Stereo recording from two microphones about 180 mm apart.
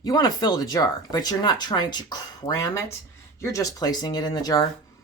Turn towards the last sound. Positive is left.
turn(degrees=20)  # may be behind; listen again after turning